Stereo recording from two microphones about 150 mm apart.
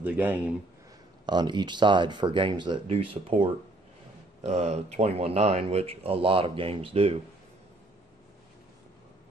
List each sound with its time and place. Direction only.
0.0 s speech: 10° right (ahead or behind)
1.2 s speech: 30° right (ahead or behind)
4.5 s speech: 45° right (ahead or behind)